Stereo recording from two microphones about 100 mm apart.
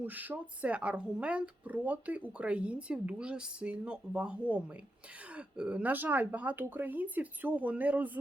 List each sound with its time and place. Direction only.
0.0 s speech: 15° right (ahead or behind)